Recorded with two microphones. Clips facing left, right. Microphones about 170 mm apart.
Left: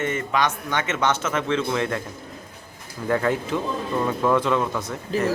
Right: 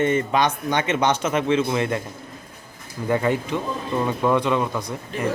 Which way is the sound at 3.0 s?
5° right (ahead or behind).